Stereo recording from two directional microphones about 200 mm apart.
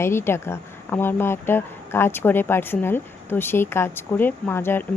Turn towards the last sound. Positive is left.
turn(degrees=10)  # may be behind; listen again after turning